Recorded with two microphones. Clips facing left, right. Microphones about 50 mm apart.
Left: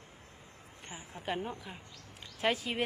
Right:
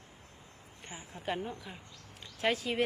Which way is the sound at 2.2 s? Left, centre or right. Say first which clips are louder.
Even; centre.